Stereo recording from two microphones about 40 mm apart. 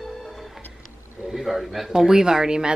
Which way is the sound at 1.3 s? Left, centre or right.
Centre.